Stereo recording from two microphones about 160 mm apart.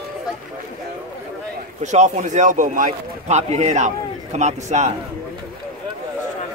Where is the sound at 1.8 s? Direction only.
45° right (ahead or behind).